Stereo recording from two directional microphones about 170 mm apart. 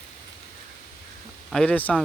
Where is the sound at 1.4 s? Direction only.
5° left (ahead or behind).